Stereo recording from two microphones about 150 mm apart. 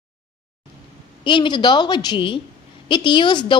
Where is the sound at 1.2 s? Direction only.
35° left (ahead or behind).